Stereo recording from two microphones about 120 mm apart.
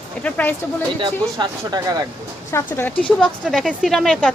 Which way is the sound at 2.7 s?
15° left (ahead or behind).